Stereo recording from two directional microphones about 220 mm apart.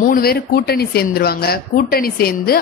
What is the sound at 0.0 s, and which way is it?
A woman's voice, 40° left (ahead or behind).